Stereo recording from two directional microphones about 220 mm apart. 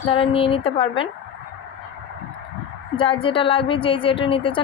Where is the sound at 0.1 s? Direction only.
25° left (ahead or behind).